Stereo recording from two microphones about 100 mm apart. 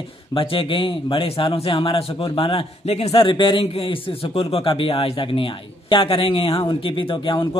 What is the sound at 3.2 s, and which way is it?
A man's voice, 55° left (ahead or behind).